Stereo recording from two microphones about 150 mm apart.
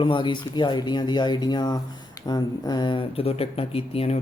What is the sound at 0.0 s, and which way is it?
A man's voice, 35° left (ahead or behind).